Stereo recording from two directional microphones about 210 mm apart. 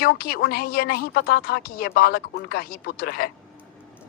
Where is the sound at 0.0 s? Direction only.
45° left (ahead or behind).